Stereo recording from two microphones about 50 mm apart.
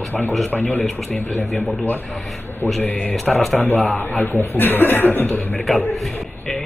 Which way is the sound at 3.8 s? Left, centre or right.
Left.